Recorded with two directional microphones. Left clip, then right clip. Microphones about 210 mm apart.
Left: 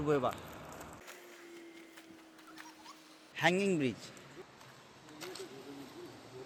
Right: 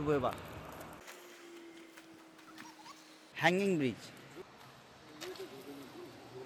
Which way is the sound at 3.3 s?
Centre (ahead or behind).